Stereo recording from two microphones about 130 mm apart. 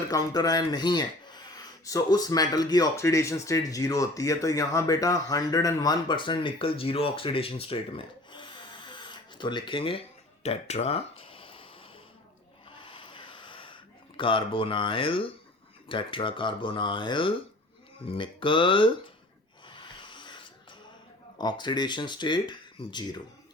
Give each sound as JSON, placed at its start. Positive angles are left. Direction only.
{"t": 0.1, "sound": "speech", "side_deg": 30}
{"t": 10.4, "sound": "a sound", "side_deg": 55}
{"t": 12.8, "sound": "sanding", "side_deg": 40}
{"t": 14.2, "sound": "speech", "side_deg": 40}
{"t": 19.6, "sound": "a sound", "side_deg": 40}
{"t": 21.3, "sound": "speech", "side_deg": 35}